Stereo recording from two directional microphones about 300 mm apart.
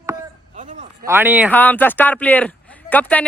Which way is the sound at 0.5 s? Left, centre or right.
Right.